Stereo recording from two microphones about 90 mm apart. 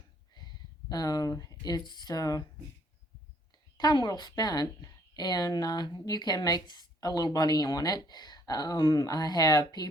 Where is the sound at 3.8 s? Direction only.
50° left (ahead or behind).